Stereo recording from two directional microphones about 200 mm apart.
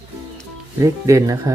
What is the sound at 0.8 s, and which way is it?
Speech, 15° right (ahead or behind).